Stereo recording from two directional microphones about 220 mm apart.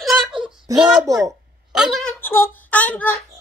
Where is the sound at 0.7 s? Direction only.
15° right (ahead or behind).